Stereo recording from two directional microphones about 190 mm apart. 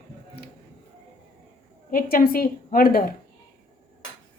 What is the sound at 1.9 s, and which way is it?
A woman's voice, 50° left (ahead or behind).